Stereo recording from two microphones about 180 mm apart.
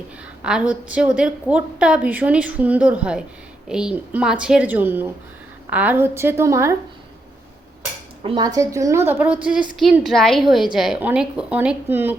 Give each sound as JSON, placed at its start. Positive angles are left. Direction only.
{"t": 0.4, "sound": "a woman's voice", "side_deg": -5}
{"t": 8.2, "sound": "a woman's voice", "side_deg": -25}